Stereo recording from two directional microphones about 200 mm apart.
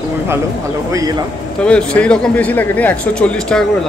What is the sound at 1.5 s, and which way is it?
Speech, 5° left (ahead or behind).